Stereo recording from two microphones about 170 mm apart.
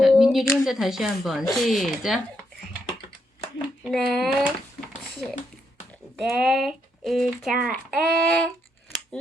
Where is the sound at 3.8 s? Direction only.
5° left (ahead or behind).